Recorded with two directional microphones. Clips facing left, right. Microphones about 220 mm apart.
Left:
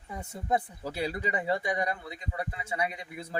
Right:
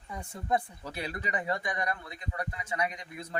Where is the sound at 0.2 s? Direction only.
20° left (ahead or behind).